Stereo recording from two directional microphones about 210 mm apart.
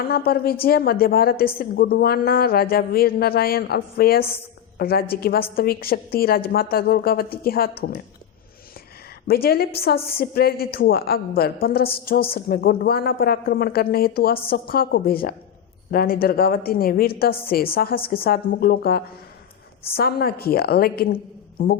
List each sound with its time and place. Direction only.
0.3 s a woman's voice: 45° left (ahead or behind)
9.2 s a woman's voice: 45° left (ahead or behind)